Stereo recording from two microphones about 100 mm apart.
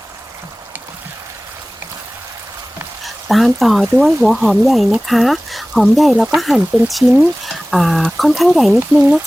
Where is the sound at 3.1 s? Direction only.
Centre (ahead or behind).